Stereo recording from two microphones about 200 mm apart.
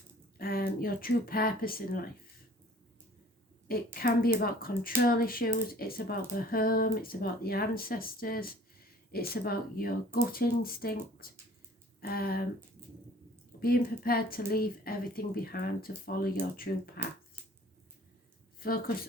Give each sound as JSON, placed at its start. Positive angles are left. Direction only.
{"t": 0.3, "sound": "speech", "side_deg": 50}
{"t": 3.9, "sound": "speech", "side_deg": 50}
{"t": 13.6, "sound": "speech", "side_deg": 50}
{"t": 18.6, "sound": "a woman's voice", "side_deg": 45}